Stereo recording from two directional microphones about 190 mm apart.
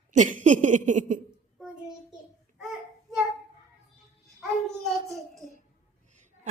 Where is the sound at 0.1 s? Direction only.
40° right (ahead or behind).